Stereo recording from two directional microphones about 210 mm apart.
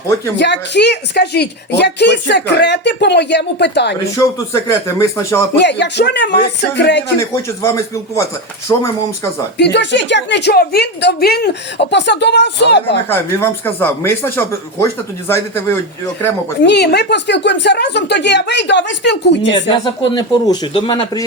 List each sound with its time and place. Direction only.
0.3 s a woman's voice: 55° left (ahead or behind)
4.2 s speech: 15° left (ahead or behind)
5.5 s a woman's voice: 55° left (ahead or behind)
7.2 s speech: 15° left (ahead or behind)
9.6 s a woman's voice: 55° left (ahead or behind)
13.1 s speech: 10° left (ahead or behind)
16.6 s a woman's voice: 55° left (ahead or behind)
19.7 s speech: 20° left (ahead or behind)